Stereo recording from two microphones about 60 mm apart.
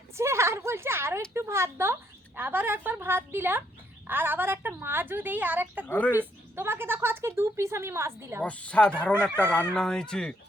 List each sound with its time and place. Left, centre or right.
0.2 s a woman's voice: right
5.9 s speech: left
6.1 s speech: right
8.4 s speech: left